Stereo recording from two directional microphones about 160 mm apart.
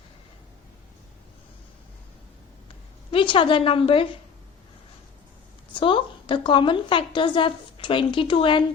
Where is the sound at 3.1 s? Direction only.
35° left (ahead or behind).